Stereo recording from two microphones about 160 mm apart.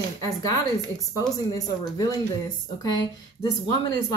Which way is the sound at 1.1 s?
20° left (ahead or behind).